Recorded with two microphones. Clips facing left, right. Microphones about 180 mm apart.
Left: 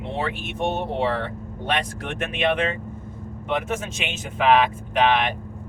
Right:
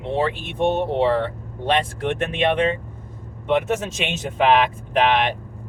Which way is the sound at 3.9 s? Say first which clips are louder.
Right 5 dB; 35° right (ahead or behind).